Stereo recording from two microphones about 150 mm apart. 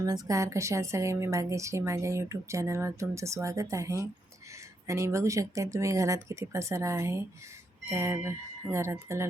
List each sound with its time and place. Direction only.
0.0 s a woman's voice: 20° right (ahead or behind)